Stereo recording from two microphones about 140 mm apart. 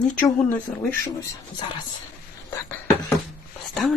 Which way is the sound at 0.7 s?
15° left (ahead or behind).